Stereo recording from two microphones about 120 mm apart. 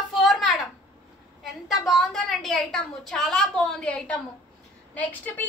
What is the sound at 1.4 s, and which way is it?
A woman's voice, centre (ahead or behind).